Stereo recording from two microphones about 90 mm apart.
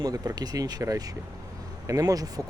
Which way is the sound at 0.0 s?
45° right (ahead or behind).